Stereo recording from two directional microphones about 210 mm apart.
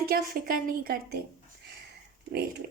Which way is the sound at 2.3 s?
50° right (ahead or behind).